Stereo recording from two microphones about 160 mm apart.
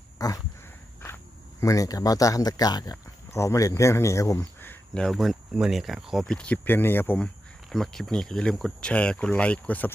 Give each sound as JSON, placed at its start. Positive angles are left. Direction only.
{"t": 0.2, "sound": "a sound", "side_deg": 25}
{"t": 1.6, "sound": "speech", "side_deg": 20}
{"t": 7.7, "sound": "speech", "side_deg": 0}